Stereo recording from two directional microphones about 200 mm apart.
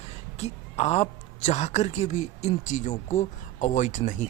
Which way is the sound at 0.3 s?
35° left (ahead or behind).